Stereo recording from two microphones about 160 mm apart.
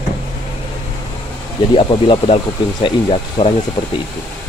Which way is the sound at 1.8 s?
30° left (ahead or behind).